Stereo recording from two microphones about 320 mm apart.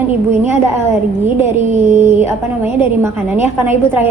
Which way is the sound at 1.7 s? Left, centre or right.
Right.